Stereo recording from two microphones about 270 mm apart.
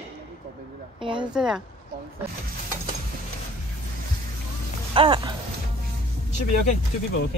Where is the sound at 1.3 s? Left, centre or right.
Centre.